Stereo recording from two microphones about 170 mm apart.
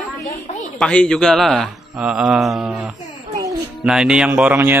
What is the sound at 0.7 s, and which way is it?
A man's voice, 5° left (ahead or behind).